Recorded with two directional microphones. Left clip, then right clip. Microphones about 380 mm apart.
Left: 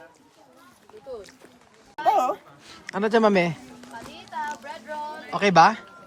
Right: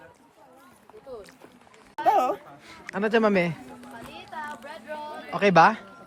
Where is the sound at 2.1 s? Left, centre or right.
Centre.